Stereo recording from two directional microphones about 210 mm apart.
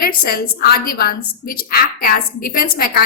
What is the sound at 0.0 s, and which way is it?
A woman's voice, 45° left (ahead or behind).